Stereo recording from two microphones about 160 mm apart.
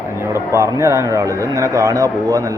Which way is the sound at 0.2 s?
15° right (ahead or behind).